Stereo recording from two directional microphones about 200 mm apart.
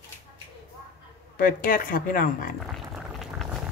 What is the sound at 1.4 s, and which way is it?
Speech, 45° left (ahead or behind).